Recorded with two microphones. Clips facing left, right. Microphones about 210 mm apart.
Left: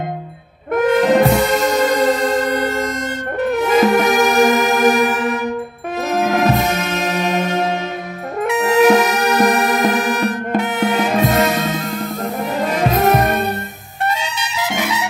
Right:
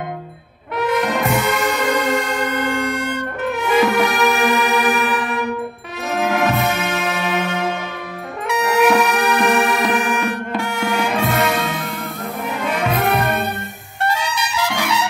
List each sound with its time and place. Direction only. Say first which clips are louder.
1.1 s music: left 6 dB; 35° left (ahead or behind)
6.2 s music: left 1 dB; 35° left (ahead or behind)
8.8 s music: left 2 dB; 40° left (ahead or behind)
10.6 s music: left 4 dB; 20° left (ahead or behind)
11.0 s music: left 3 dB; 40° left (ahead or behind)
12.6 s brass instrument: left 4 dB; 40° left (ahead or behind)
14.0 s trumpet: even; 25° left (ahead or behind)